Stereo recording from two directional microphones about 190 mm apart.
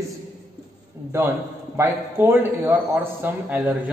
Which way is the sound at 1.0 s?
15° right (ahead or behind).